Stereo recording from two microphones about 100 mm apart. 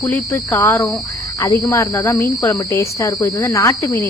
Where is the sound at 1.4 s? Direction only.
35° left (ahead or behind).